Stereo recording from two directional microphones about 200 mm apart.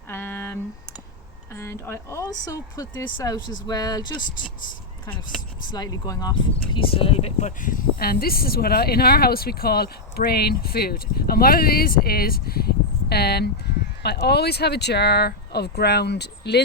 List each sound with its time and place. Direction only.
0.1 s a sound: 10° left (ahead or behind)
1.5 s speech: 10° left (ahead or behind)
5.0 s speech: 5° left (ahead or behind)
5.7 s speech: 20° left (ahead or behind); by 16.6 s 55° left (ahead or behind)